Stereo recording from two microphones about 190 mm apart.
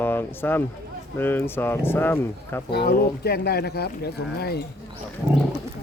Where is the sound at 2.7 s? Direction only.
60° left (ahead or behind).